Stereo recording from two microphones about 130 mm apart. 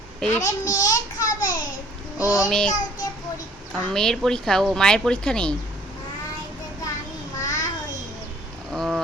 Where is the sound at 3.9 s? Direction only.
5° left (ahead or behind).